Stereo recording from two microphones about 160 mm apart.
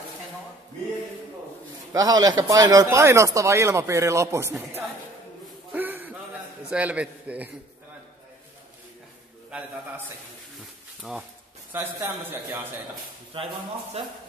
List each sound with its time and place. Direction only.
1.9 s speech: 20° right (ahead or behind)
5.7 s a sound: 10° right (ahead or behind)
6.7 s a man's voice: 10° right (ahead or behind)
9.5 s a man's voice: 10° right (ahead or behind)
11.7 s a man's voice: 10° right (ahead or behind)
13.3 s speech: 30° right (ahead or behind)